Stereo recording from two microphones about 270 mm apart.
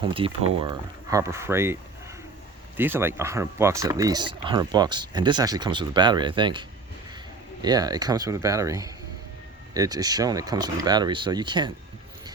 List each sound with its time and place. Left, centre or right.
0.0 s speech: centre